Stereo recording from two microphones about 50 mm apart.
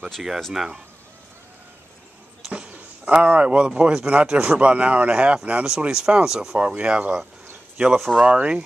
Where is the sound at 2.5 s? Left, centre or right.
Right.